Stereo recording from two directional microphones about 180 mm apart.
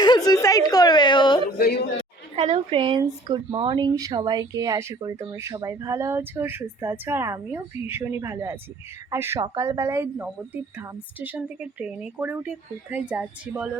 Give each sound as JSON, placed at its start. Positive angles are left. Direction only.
{"t": 0.0, "sound": "a sound", "side_deg": 20}
{"t": 1.5, "sound": "a man's voice", "side_deg": 60}
{"t": 2.3, "sound": "speech", "side_deg": -30}